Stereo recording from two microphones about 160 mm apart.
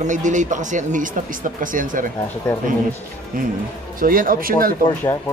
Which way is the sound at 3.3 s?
60° right (ahead or behind).